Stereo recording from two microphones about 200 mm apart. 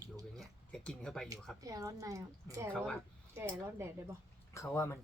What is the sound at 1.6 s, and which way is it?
A woman's voice, 15° right (ahead or behind).